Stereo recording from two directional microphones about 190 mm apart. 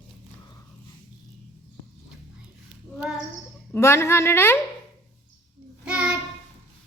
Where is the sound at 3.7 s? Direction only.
15° left (ahead or behind).